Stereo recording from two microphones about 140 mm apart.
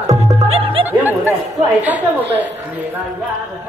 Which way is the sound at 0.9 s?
15° right (ahead or behind).